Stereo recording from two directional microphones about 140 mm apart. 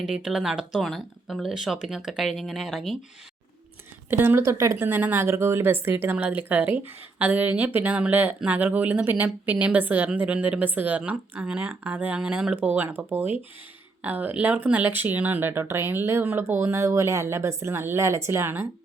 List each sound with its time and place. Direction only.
0.1 s speech: 5° right (ahead or behind)
4.1 s speech: 15° right (ahead or behind)